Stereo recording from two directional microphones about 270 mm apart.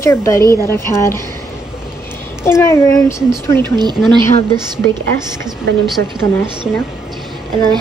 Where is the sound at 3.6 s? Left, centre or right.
Centre.